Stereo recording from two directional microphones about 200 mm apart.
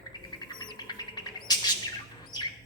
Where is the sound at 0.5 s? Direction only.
20° left (ahead or behind).